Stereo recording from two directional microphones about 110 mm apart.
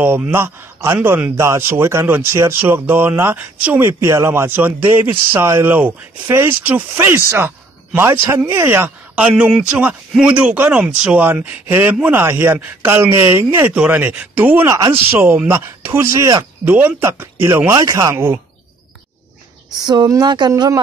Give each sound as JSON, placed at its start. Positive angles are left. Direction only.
{"t": 0.0, "sound": "a man's voice", "side_deg": -20}
{"t": 16.6, "sound": "a man's voice", "side_deg": -15}
{"t": 18.1, "sound": "a man's voice", "side_deg": -20}
{"t": 20.1, "sound": "speech", "side_deg": -40}